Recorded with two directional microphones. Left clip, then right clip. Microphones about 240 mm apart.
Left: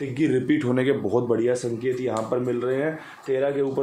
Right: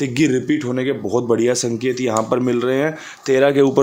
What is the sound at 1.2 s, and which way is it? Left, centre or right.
Speech, right.